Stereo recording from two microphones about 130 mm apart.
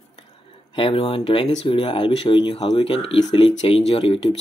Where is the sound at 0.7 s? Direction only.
45° left (ahead or behind).